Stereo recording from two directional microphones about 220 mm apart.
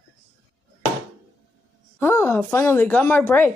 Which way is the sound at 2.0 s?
10° left (ahead or behind).